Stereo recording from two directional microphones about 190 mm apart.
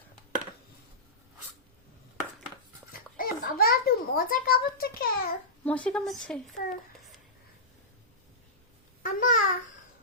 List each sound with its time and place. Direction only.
2.9 s a sound: 50° left (ahead or behind)
5.6 s a woman's voice: 5° left (ahead or behind)
9.0 s babbling: 45° left (ahead or behind)